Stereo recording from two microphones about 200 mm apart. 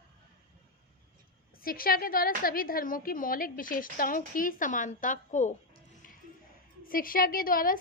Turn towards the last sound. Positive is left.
turn(degrees=45)  # may be behind; listen again after turning